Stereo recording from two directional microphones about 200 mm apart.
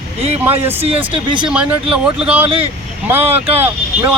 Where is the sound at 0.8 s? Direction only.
25° right (ahead or behind).